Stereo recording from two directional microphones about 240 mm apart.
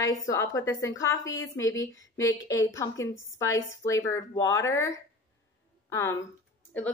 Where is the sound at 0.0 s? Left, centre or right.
Centre.